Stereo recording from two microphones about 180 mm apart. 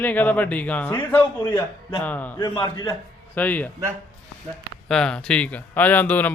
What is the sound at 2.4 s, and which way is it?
Speech, 20° left (ahead or behind).